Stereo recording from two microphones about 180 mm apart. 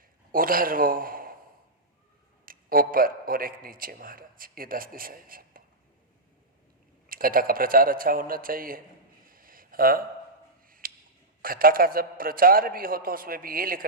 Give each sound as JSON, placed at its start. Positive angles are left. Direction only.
{"t": 0.3, "sound": "a man's voice", "side_deg": -55}
{"t": 2.5, "sound": "a man's voice", "side_deg": -50}
{"t": 7.1, "sound": "a man's voice", "side_deg": -55}
{"t": 9.2, "sound": "a sound", "side_deg": -50}
{"t": 10.7, "sound": "tick-tock", "side_deg": -50}
{"t": 11.4, "sound": "a man's voice", "side_deg": -50}